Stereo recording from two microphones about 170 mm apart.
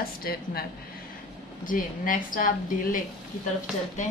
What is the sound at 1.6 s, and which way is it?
Speech, 55° left (ahead or behind).